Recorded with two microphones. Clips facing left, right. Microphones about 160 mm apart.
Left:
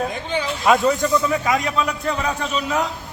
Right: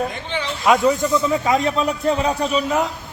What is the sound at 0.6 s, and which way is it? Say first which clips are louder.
Speech: right 1 dB; 5° right (ahead or behind).